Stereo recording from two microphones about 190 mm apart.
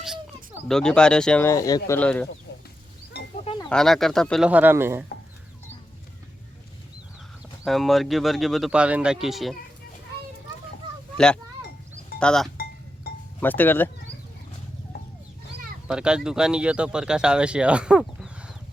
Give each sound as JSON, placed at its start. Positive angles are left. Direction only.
{"t": 0.7, "sound": "speech", "side_deg": 5}
{"t": 1.5, "sound": "speech", "side_deg": 20}
{"t": 2.0, "sound": "speech", "side_deg": 5}
{"t": 3.4, "sound": "a sound", "side_deg": 30}
{"t": 3.7, "sound": "speech", "side_deg": 0}
{"t": 7.6, "sound": "speech", "side_deg": 0}
{"t": 12.2, "sound": "speech", "side_deg": 5}
{"t": 15.9, "sound": "speech", "side_deg": -5}